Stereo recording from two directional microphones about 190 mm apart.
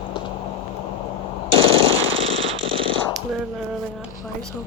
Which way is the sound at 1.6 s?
30° right (ahead or behind).